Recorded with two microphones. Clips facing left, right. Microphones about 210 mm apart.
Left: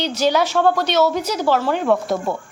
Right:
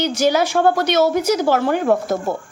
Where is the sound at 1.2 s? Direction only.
50° right (ahead or behind).